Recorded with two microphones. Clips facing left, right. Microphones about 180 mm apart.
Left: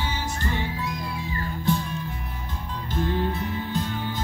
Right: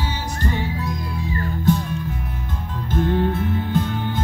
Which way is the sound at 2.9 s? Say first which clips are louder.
Right 6 dB; 50° right (ahead or behind).